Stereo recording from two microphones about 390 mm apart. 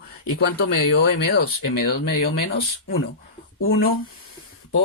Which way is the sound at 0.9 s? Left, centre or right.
Left.